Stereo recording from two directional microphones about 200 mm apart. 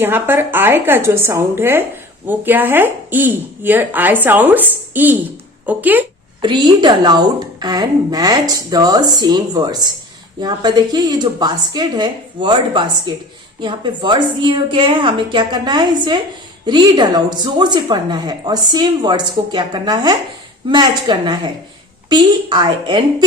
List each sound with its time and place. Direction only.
0.0 s speech: 10° right (ahead or behind)
6.4 s a woman's voice: 20° right (ahead or behind)